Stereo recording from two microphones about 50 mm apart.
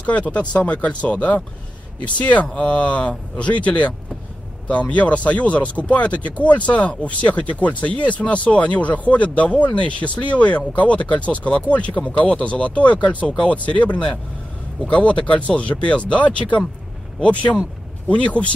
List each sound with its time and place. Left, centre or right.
0.0 s speech: left